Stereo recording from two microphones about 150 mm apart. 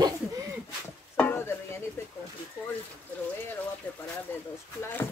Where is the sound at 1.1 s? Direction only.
10° left (ahead or behind).